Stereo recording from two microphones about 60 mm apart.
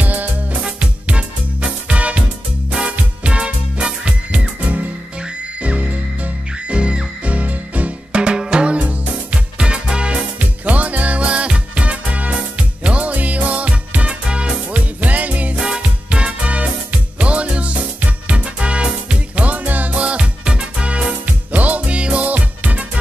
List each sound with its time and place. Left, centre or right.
0.0 s music: right
15.6 s music: centre